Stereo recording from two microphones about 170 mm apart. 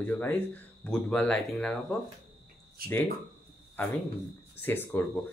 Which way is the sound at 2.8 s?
60° right (ahead or behind).